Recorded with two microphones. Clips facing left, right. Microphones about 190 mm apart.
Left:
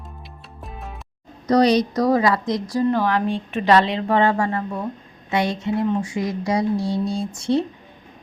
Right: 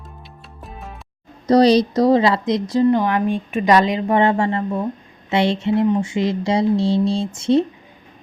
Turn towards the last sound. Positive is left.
turn(degrees=-20)  # may be behind; listen again after turning